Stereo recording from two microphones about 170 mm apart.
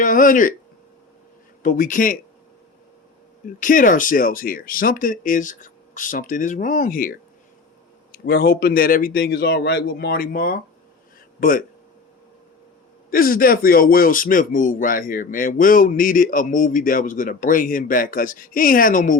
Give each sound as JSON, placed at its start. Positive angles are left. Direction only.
{"t": 0.0, "sound": "a man's voice", "side_deg": 50}
{"t": 1.6, "sound": "a man's voice", "side_deg": 50}
{"t": 3.6, "sound": "a man's voice", "side_deg": 50}
{"t": 13.1, "sound": "a man's voice", "side_deg": 60}